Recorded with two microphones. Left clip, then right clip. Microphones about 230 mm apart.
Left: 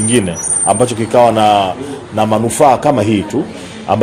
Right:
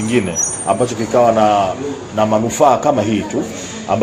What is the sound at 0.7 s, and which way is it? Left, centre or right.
A man's voice, left.